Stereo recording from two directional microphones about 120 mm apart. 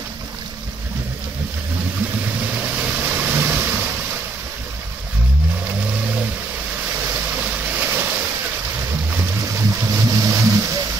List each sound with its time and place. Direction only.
2.4 s vehicle: 15° right (ahead or behind)
5.8 s vehicle: 10° right (ahead or behind)
7.3 s vehicle: 15° right (ahead or behind)
9.1 s boat: 25° right (ahead or behind)